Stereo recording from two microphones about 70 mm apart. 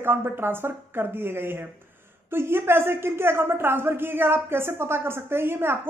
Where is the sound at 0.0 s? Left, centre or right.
Right.